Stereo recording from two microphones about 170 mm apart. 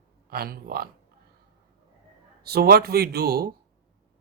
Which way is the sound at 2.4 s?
65° right (ahead or behind).